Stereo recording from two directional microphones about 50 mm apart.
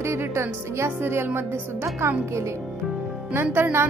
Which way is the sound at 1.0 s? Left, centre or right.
Right.